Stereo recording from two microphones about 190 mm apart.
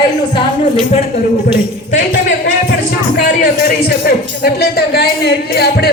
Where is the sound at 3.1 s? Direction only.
55° left (ahead or behind).